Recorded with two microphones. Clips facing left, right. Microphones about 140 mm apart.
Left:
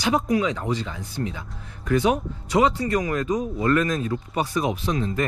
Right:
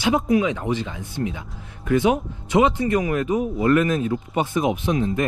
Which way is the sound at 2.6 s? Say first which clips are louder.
Right 2 dB; 20° right (ahead or behind).